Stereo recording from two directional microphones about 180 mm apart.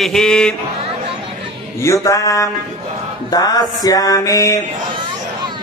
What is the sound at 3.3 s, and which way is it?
Music, 20° left (ahead or behind).